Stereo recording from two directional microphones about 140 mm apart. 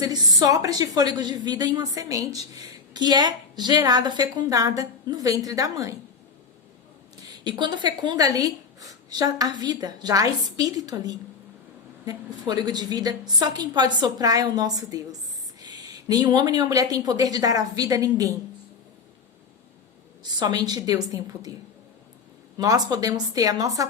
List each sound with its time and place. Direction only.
0.0 s a woman's voice: 25° right (ahead or behind)
7.4 s a woman's voice: 35° right (ahead or behind)
20.2 s a woman's voice: 25° right (ahead or behind)
22.5 s a woman's voice: 25° right (ahead or behind)